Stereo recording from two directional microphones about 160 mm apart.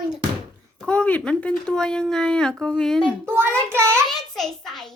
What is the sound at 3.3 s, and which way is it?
Child singing, 15° right (ahead or behind).